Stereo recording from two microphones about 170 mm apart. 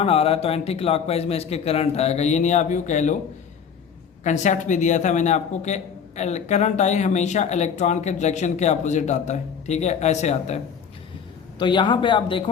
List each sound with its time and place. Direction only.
0.0 s a man's voice: 35° left (ahead or behind)
4.2 s a man's voice: 45° left (ahead or behind)
11.6 s speech: 30° left (ahead or behind)